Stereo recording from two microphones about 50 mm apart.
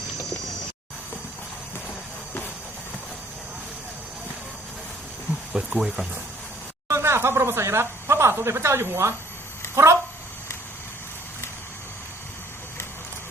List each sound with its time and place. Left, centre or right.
5.5 s speech: centre
6.8 s speech: right